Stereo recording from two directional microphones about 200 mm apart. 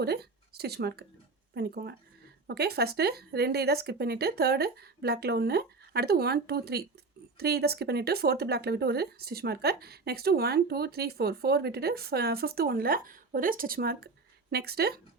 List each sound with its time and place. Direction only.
0.0 s speech: 55° right (ahead or behind)